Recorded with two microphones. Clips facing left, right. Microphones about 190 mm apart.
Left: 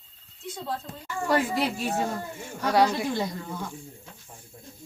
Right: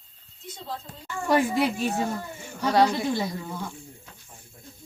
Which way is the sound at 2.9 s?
10° left (ahead or behind).